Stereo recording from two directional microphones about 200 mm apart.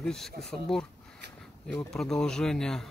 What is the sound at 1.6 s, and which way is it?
Speech, centre (ahead or behind).